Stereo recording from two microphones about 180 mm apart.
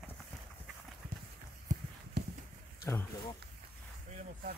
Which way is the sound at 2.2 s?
65° right (ahead or behind).